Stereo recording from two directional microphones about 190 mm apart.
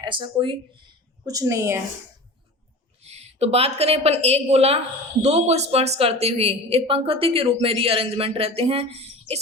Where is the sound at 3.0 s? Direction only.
35° right (ahead or behind).